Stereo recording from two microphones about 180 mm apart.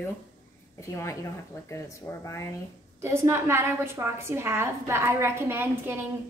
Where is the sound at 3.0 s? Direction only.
15° right (ahead or behind).